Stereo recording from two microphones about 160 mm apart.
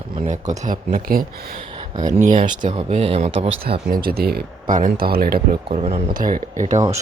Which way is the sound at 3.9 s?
70° right (ahead or behind).